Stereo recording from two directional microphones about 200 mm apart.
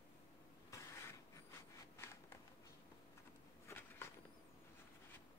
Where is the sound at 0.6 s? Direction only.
15° left (ahead or behind).